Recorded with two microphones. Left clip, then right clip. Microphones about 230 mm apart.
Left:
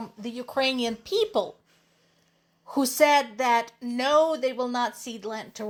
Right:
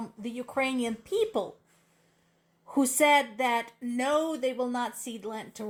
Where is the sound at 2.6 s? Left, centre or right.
Left.